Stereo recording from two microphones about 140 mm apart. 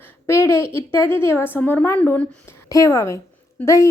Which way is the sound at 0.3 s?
20° left (ahead or behind).